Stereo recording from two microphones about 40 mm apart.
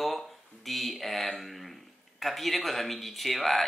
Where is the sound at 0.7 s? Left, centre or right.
Centre.